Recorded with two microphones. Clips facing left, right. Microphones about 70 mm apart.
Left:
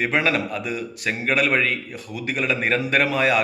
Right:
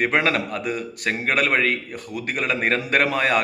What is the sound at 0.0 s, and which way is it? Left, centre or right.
A man's voice, right.